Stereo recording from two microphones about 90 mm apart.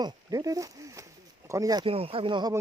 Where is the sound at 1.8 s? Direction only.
90° right; by 2.4 s 75° right (ahead or behind).